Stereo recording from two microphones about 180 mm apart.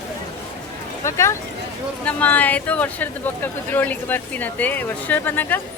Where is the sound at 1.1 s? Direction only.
15° left (ahead or behind).